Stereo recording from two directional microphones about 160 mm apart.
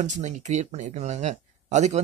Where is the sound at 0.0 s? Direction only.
50° right (ahead or behind).